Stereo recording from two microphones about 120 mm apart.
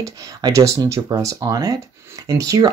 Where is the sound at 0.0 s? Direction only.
25° right (ahead or behind).